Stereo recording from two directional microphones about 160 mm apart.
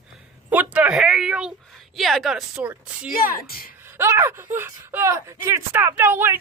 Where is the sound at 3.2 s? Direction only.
65° left (ahead or behind).